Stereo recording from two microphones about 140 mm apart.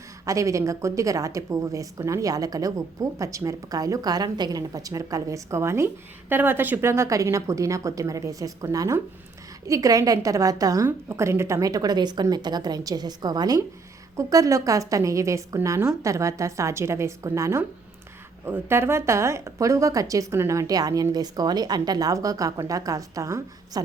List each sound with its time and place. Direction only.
0.3 s a woman's voice: 25° right (ahead or behind)